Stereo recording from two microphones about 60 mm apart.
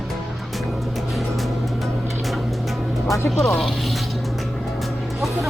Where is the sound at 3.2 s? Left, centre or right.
Centre.